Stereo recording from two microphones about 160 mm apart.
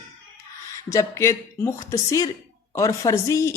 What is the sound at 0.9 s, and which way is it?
Speech, 20° left (ahead or behind).